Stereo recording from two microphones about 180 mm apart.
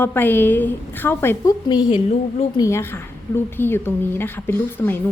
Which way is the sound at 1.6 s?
25° left (ahead or behind).